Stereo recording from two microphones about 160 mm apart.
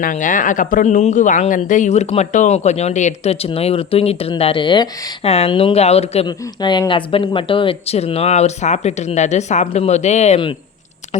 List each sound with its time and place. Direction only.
0.0 s speech: 55° left (ahead or behind); by 5.1 s 25° left (ahead or behind)
5.2 s speech: 40° left (ahead or behind)
6.2 s speech: 25° left (ahead or behind); by 10.4 s 45° left (ahead or behind)